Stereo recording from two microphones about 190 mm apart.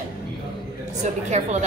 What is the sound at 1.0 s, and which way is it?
Speech, 35° right (ahead or behind).